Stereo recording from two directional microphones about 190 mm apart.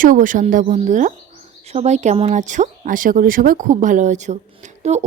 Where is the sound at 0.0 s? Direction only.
45° right (ahead or behind).